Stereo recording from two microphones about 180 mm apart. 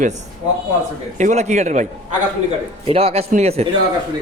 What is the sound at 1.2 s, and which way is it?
Speech, 40° right (ahead or behind).